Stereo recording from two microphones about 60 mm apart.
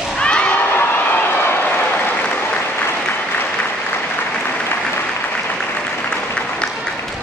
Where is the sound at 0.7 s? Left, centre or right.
Left.